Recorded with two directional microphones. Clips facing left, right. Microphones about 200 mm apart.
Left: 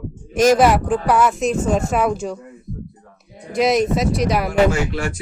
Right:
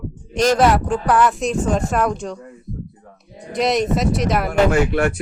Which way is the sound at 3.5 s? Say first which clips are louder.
Left 2 dB; centre (ahead or behind).